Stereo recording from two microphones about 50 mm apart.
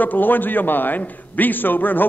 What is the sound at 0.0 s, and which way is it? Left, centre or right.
A man's voice, left.